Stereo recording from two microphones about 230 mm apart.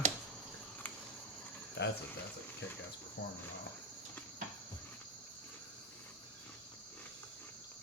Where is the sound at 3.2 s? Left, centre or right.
Left.